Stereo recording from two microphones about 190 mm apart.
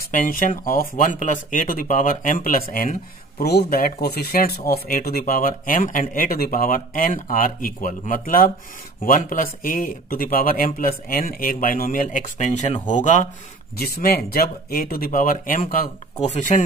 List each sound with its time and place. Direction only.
0.0 s speech: 45° left (ahead or behind)
13.7 s speech: 55° left (ahead or behind)